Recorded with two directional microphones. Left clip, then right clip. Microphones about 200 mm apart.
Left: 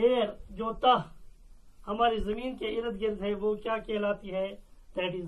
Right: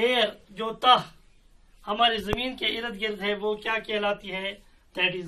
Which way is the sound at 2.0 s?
90° right.